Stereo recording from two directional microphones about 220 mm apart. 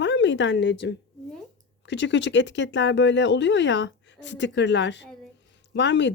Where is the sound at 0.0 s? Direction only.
55° left (ahead or behind).